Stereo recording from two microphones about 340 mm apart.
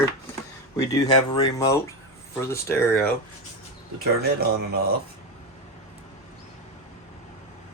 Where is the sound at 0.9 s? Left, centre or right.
Centre.